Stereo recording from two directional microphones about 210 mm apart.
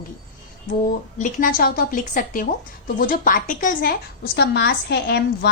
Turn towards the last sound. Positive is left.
turn(degrees=50)  # may be behind; listen again after turning